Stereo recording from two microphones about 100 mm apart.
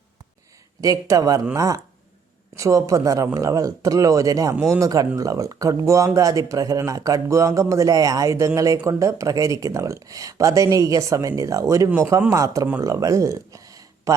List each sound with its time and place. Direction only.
0.8 s speech: 35° right (ahead or behind)